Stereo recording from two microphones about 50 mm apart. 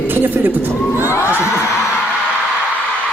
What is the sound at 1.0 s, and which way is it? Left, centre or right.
Crowd, left.